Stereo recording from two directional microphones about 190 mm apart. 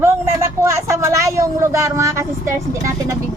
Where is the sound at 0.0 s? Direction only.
15° right (ahead or behind).